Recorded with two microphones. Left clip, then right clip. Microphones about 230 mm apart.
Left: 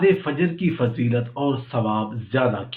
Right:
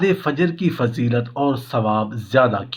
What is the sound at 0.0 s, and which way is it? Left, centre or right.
Speech, right.